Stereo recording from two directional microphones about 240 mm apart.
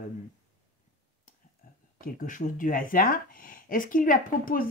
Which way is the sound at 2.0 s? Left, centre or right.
Left.